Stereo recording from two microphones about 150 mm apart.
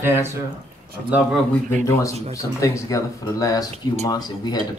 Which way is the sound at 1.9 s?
20° left (ahead or behind).